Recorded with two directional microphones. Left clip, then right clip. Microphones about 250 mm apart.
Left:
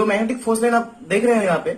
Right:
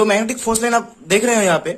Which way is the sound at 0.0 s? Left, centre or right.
Right.